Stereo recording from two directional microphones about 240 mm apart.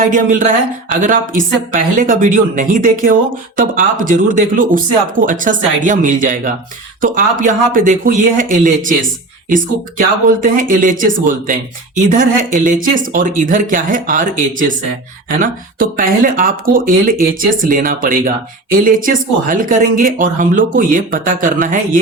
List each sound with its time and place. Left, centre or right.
0.0 s a woman's voice: right
10.0 s a woman's voice: right